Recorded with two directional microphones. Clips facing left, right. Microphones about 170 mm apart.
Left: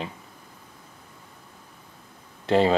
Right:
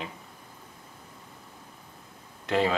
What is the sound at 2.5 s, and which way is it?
Speech, 30° left (ahead or behind).